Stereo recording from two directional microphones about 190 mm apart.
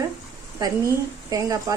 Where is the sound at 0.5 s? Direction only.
20° right (ahead or behind).